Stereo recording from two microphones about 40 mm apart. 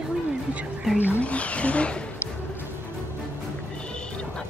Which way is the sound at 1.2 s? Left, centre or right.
Left.